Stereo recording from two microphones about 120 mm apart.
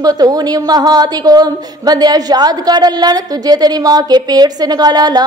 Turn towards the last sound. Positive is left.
turn(degrees=-35)  # may be behind; listen again after turning